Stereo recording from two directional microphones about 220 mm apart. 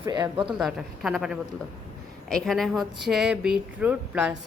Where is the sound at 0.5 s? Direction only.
Centre (ahead or behind).